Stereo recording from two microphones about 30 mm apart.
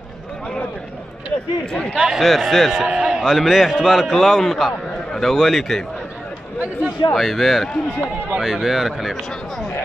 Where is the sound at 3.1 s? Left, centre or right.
Centre.